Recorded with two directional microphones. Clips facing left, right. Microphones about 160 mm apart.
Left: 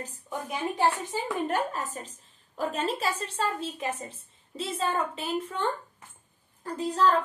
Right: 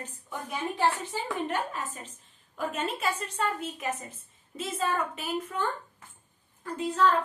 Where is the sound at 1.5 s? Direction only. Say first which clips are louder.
Left 3 dB; 40° left (ahead or behind).